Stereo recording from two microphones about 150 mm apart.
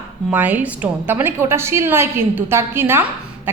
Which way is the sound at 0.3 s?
10° right (ahead or behind).